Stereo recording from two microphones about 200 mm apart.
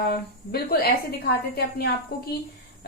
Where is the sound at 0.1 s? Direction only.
50° left (ahead or behind).